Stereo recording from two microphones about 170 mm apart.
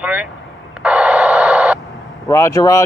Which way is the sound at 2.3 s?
15° left (ahead or behind).